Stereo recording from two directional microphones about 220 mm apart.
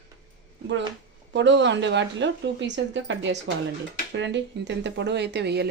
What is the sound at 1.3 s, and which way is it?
A woman's voice, 55° right (ahead or behind).